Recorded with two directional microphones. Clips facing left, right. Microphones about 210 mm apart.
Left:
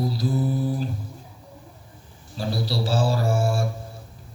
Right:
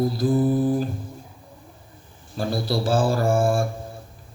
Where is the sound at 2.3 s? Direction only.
50° right (ahead or behind).